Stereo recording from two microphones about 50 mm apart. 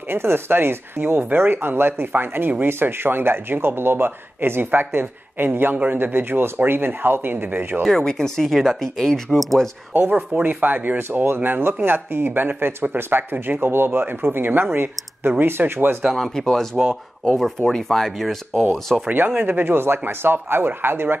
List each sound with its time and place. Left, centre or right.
0.1 s speech: right
7.8 s speech: centre
9.9 s speech: right
16.2 s speech: centre
16.8 s speech: centre
17.6 s speech: centre
19.0 s speech: right